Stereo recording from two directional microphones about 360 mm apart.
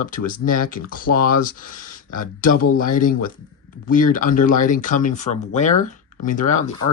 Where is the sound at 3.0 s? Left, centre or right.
Left.